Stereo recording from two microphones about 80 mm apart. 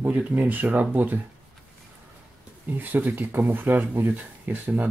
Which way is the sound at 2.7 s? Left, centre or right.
Right.